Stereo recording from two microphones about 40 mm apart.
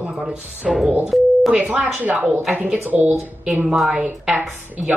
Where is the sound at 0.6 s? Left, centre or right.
Centre.